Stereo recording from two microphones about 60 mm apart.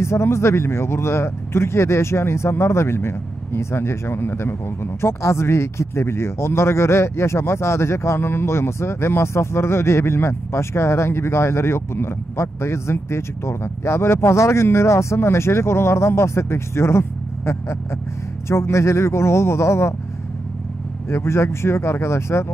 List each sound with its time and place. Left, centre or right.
0.0 s speech: left
18.5 s speech: left
21.1 s speech: left